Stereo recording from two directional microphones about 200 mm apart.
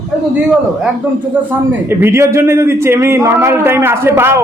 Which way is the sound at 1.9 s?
10° right (ahead or behind).